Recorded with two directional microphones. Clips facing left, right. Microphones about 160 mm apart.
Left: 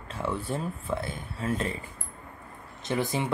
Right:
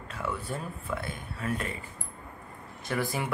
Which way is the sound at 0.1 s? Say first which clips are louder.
Left 4 dB; 25° left (ahead or behind).